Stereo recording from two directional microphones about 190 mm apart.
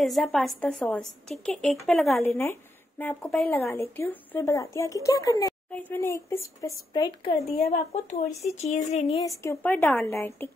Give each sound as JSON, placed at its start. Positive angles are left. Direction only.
{"t": 0.0, "sound": "a woman's voice", "side_deg": 0}
{"t": 9.2, "sound": "speech", "side_deg": 15}